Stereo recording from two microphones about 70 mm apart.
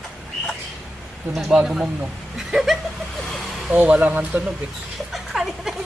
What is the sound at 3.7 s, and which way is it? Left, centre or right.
Speech, right.